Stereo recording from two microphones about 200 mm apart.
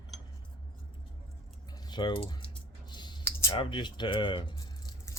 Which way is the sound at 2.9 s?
20° left (ahead or behind).